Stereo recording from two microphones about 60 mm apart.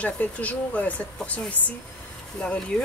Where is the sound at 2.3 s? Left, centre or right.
Centre.